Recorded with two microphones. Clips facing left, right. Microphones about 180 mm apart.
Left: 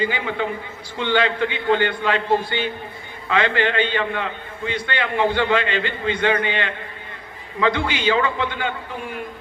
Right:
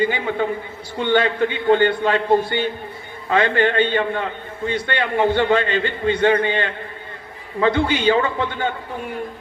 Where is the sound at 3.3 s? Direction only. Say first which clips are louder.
Right 3 dB; 50° right (ahead or behind).